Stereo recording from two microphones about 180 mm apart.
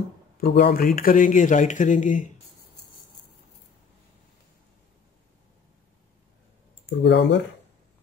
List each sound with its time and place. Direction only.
0.4 s speech: 55° left (ahead or behind)
7.0 s speech: 75° left (ahead or behind)